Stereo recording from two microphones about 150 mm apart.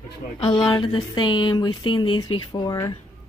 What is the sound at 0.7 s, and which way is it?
Speech, 30° left (ahead or behind).